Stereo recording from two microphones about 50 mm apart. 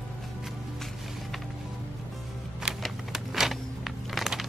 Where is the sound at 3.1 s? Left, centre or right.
Centre.